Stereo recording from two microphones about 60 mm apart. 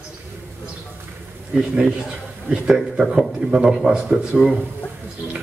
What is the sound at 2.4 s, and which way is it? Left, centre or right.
A man's voice, centre.